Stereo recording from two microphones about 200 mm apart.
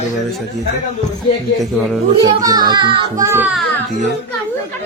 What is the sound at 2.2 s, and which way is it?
A child's voice, 20° right (ahead or behind).